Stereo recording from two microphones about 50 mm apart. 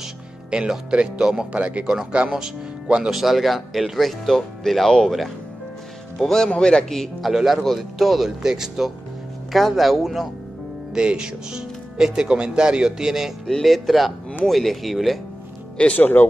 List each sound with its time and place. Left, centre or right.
0.5 s speech: centre
3.1 s speech: centre
6.1 s a man's voice: centre
7.0 s speech: centre
11.0 s speech: centre
13.5 s speech: centre
16.0 s speech: left